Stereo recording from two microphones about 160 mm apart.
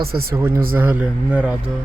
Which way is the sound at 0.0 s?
70° right (ahead or behind).